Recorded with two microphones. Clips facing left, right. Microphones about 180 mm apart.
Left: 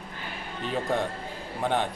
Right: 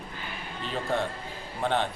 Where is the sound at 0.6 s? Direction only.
15° left (ahead or behind).